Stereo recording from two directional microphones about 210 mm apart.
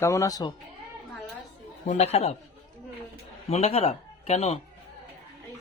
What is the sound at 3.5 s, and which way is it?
Speech, 30° left (ahead or behind).